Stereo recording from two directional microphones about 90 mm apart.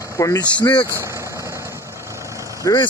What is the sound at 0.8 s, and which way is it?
Vehicle, 30° right (ahead or behind).